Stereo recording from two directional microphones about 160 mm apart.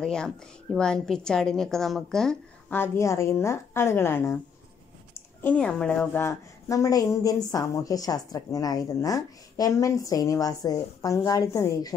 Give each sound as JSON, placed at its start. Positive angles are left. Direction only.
{"t": 0.0, "sound": "a woman's voice", "side_deg": 5}
{"t": 2.8, "sound": "a woman's voice", "side_deg": 15}
{"t": 5.4, "sound": "a woman's voice", "side_deg": 10}